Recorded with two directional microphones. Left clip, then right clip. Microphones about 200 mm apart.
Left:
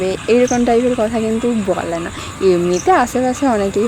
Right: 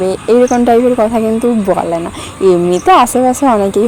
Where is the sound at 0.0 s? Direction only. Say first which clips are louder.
Right 4 dB; 20° right (ahead or behind).